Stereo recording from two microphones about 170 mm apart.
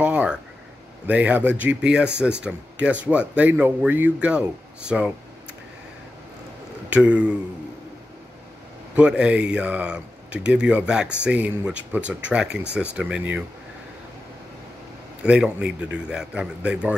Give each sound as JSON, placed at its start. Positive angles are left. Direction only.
{"t": 0.0, "sound": "a sound", "side_deg": -5}
{"t": 1.0, "sound": "speech", "side_deg": -10}
{"t": 6.9, "sound": "speech", "side_deg": -10}
{"t": 8.9, "sound": "speech", "side_deg": -5}
{"t": 15.2, "sound": "speech", "side_deg": -5}